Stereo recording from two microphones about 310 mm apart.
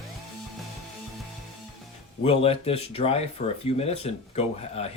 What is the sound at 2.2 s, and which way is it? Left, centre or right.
Speech, centre.